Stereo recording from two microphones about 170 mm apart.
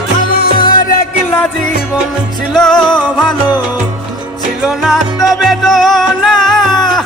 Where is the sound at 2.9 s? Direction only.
25° left (ahead or behind).